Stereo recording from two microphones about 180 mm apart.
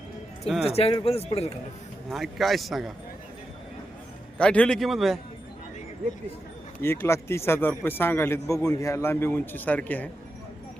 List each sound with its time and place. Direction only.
0.7 s speech: 35° left (ahead or behind)
2.0 s a man's voice: centre (ahead or behind)
4.4 s a man's voice: 5° left (ahead or behind)
6.8 s speech: 15° left (ahead or behind)